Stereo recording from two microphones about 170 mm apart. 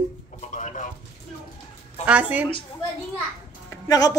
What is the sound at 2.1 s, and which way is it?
Speech, 10° right (ahead or behind).